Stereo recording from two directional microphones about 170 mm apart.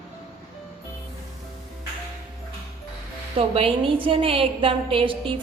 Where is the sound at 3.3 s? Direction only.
35° right (ahead or behind).